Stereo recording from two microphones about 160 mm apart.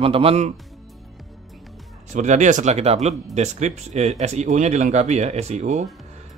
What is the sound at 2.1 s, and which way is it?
Speech, 50° right (ahead or behind).